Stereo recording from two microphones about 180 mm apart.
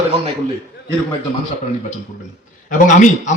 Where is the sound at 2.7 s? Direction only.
45° left (ahead or behind).